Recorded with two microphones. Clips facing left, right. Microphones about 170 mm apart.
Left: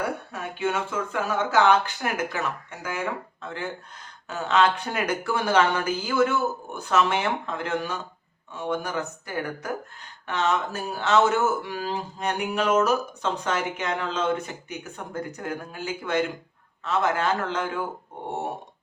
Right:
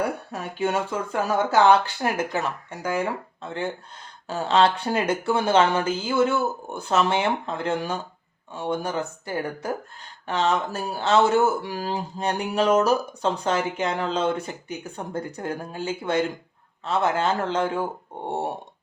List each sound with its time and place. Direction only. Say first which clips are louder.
0.3 s speech: right 2 dB; 35° right (ahead or behind)